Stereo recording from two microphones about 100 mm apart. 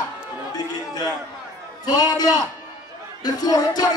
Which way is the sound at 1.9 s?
40° left (ahead or behind).